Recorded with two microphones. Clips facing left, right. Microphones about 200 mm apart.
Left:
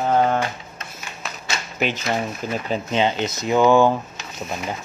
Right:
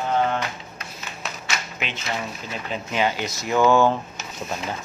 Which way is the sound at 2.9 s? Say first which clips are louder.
Left 2 dB; 20° left (ahead or behind).